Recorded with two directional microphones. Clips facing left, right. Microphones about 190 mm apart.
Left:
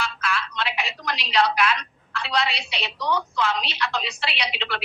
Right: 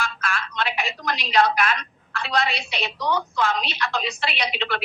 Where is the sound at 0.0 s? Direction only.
50° right (ahead or behind).